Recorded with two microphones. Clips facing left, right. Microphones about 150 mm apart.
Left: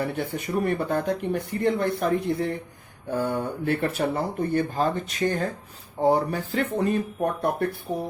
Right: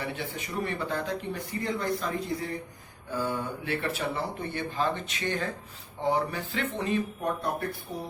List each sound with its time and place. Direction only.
0.0 s speech: 50° left (ahead or behind)